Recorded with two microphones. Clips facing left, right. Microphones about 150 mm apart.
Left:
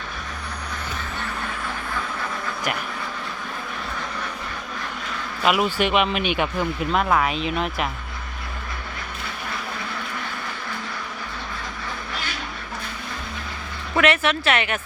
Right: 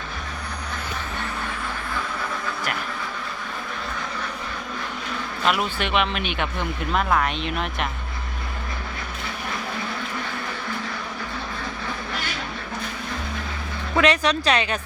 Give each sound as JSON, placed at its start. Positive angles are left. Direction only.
{"t": 5.5, "sound": "speech", "side_deg": 10}
{"t": 13.9, "sound": "a woman's voice", "side_deg": -20}